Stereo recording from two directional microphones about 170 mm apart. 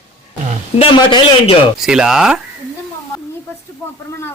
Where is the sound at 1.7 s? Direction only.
5° right (ahead or behind).